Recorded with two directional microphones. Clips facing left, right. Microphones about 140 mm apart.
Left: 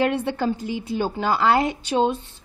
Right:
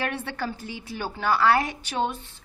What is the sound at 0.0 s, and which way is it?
A woman's voice, 15° left (ahead or behind).